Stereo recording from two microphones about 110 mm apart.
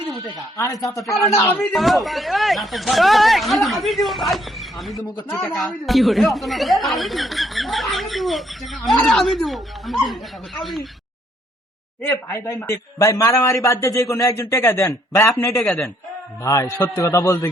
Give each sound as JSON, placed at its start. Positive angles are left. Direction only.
{"t": 0.5, "sound": "a man's voice", "side_deg": 30}
{"t": 1.5, "sound": "speech", "side_deg": 0}
{"t": 12.0, "sound": "a man's voice", "side_deg": 30}
{"t": 15.6, "sound": "speech", "side_deg": 5}
{"t": 16.4, "sound": "a man's voice", "side_deg": 30}